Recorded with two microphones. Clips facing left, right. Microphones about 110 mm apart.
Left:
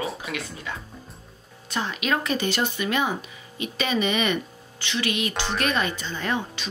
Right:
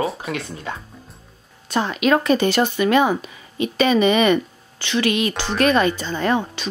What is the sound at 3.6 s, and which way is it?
A woman's voice, 50° right (ahead or behind).